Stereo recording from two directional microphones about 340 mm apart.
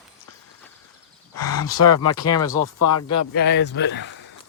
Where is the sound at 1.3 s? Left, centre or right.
Left.